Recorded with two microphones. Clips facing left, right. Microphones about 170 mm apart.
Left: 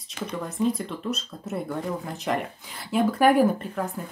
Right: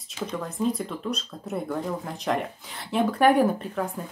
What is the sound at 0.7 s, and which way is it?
Speech, centre (ahead or behind).